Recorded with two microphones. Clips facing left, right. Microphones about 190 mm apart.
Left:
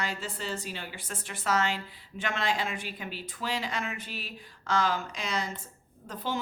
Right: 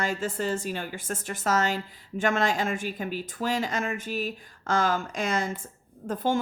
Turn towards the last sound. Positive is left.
turn(degrees=-50)  # may be behind; listen again after turning